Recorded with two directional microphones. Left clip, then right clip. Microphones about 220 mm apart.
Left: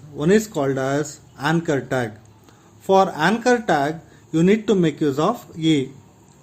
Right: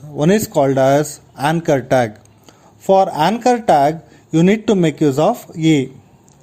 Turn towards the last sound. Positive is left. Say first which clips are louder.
# right 5 dB
turn(degrees=-30)  # may be behind; listen again after turning